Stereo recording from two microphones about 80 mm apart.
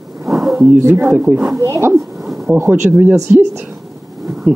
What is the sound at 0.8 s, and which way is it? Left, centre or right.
Speech, right.